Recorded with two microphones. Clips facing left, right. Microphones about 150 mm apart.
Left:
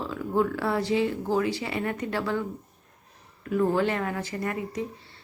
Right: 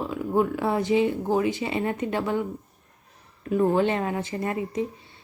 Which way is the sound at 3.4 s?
20° right (ahead or behind).